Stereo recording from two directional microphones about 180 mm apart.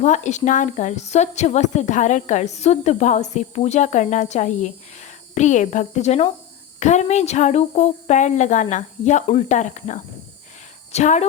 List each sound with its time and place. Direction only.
0.0 s a woman's voice: 40° left (ahead or behind)